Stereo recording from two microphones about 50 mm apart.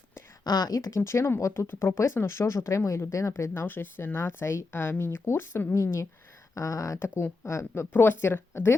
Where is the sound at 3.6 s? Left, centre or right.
Left.